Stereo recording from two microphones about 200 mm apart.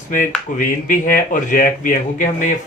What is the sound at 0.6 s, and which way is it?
Speech, 45° left (ahead or behind).